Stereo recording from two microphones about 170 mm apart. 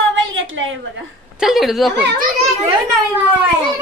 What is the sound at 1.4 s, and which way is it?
Speech, centre (ahead or behind).